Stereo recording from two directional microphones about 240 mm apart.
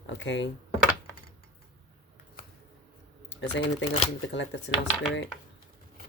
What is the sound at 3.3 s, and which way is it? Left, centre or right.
Speech, left.